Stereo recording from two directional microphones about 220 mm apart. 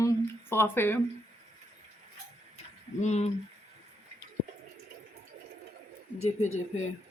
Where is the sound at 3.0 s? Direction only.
30° left (ahead or behind).